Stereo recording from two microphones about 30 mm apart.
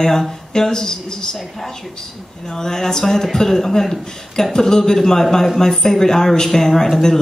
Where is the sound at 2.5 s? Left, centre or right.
Centre.